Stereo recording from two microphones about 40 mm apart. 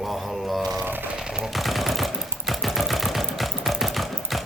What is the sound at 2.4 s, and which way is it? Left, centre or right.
Sewing machine, centre.